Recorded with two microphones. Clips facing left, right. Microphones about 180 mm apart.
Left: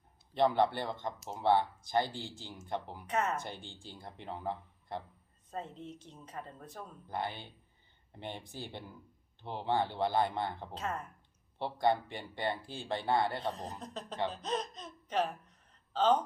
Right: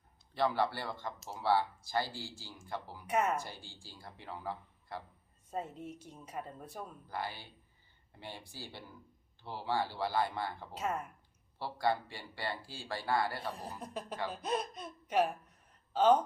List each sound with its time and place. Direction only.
0.3 s speech: 20° left (ahead or behind)
3.1 s speech: 10° right (ahead or behind)
3.4 s speech: 20° left (ahead or behind)
5.5 s speech: 10° right (ahead or behind)
7.1 s speech: 20° left (ahead or behind)
10.8 s speech: 10° right (ahead or behind)
11.6 s speech: 20° left (ahead or behind)
13.5 s speech: 10° right (ahead or behind)